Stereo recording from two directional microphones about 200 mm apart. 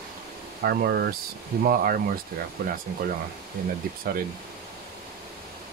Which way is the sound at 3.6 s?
45° right (ahead or behind).